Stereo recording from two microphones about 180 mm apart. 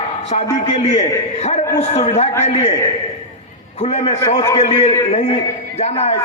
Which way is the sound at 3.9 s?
40° left (ahead or behind).